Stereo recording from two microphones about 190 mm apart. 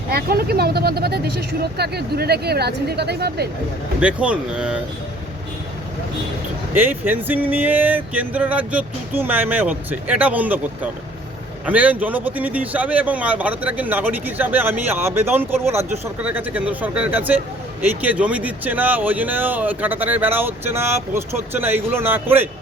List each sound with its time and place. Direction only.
0.1 s speech: 55° right (ahead or behind)
4.0 s speech: 5° right (ahead or behind)
6.7 s speech: 10° right (ahead or behind)
11.6 s speech: 10° right (ahead or behind)